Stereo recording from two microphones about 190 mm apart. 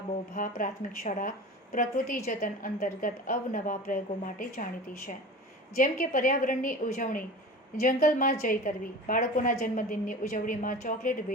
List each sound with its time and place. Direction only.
0.3 s a woman's voice: 45° left (ahead or behind)